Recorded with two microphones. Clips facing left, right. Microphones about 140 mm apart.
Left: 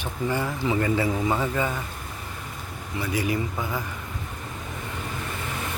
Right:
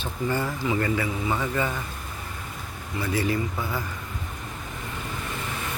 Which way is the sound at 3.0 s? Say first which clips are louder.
Right 1 dB; 15° left (ahead or behind).